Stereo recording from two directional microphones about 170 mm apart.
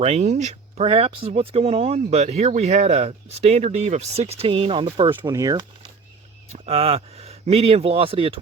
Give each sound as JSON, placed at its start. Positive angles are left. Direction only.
{"t": 0.0, "sound": "speech", "side_deg": -40}
{"t": 5.2, "sound": "speech", "side_deg": -20}
{"t": 6.5, "sound": "speech", "side_deg": -35}